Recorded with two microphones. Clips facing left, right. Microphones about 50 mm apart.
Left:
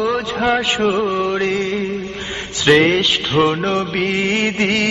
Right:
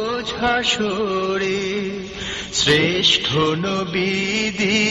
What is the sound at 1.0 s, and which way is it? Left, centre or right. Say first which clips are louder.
Music: left 2 dB; centre.